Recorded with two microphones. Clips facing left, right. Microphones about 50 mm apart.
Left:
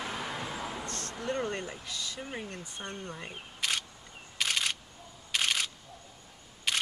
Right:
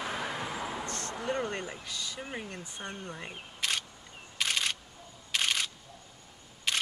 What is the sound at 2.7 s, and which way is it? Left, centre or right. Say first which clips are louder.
Speech: even; centre.